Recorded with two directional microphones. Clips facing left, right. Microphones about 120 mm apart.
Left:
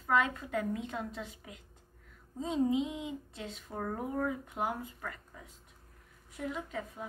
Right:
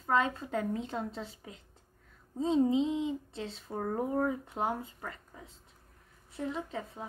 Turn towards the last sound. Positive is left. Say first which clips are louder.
# right 1 dB
turn(degrees=-30)  # may be behind; listen again after turning